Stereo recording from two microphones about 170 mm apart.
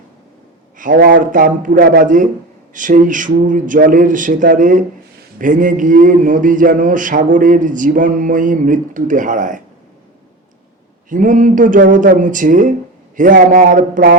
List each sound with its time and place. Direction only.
0.9 s speech: 90° right
1.2 s a man's voice: 50° right (ahead or behind)
11.1 s a man's voice: 50° right (ahead or behind)